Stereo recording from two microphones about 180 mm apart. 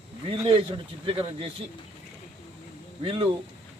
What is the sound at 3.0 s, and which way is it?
Speech, 30° right (ahead or behind).